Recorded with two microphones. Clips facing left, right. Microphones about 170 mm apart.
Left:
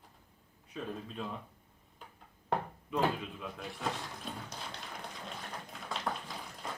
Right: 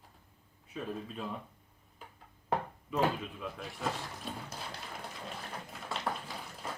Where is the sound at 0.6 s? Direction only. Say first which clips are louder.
Right 1 dB; 5° right (ahead or behind).